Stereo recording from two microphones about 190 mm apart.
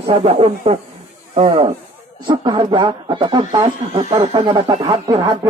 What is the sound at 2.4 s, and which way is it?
Speech, 25° right (ahead or behind).